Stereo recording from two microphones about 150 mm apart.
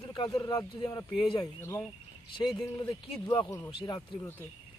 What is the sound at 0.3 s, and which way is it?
Speech, 25° left (ahead or behind).